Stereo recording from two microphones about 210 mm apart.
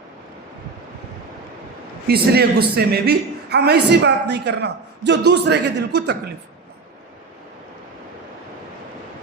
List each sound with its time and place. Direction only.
2.0 s a man's voice: 50° right (ahead or behind)